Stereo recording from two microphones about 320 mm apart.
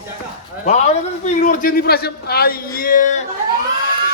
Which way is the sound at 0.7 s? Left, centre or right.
Left.